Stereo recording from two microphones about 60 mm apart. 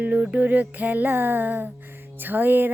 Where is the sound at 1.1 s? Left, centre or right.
Right.